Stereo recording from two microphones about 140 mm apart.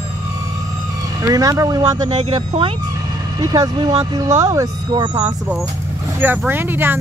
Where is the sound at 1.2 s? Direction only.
25° right (ahead or behind).